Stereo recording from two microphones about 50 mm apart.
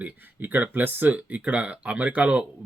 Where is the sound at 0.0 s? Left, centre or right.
Right.